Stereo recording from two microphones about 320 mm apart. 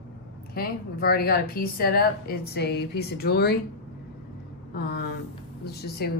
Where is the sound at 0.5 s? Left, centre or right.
Left.